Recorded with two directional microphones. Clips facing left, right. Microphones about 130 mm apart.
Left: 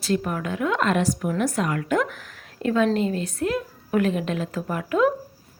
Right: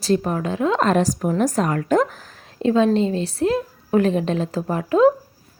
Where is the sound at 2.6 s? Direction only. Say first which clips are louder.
Right 4 dB; 25° right (ahead or behind).